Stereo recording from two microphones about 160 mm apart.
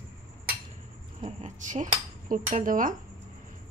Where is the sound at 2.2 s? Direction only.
55° right (ahead or behind).